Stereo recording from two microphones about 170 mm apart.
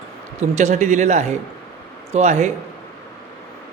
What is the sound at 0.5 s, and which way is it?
A man's voice, 40° right (ahead or behind).